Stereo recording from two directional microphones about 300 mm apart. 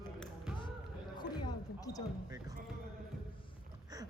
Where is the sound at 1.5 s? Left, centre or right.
Centre.